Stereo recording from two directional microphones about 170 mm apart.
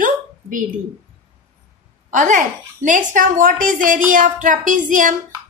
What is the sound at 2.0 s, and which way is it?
A woman's voice, 50° right (ahead or behind).